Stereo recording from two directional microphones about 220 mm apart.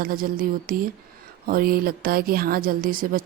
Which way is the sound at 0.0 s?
40° right (ahead or behind).